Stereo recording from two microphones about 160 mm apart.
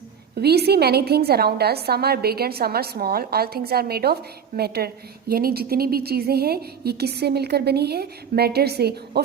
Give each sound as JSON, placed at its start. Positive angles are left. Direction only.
{"t": 0.3, "sound": "a woman's voice", "side_deg": -90}